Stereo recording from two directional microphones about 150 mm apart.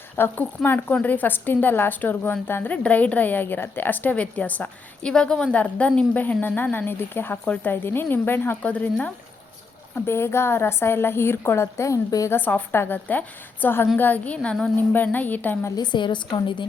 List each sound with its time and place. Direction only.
0.2 s speech: 15° left (ahead or behind)
15.7 s a woman's voice: 30° left (ahead or behind)